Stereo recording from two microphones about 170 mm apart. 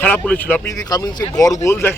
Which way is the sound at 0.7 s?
20° left (ahead or behind).